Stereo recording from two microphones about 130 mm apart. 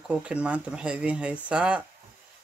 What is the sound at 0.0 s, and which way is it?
Speech, 10° right (ahead or behind).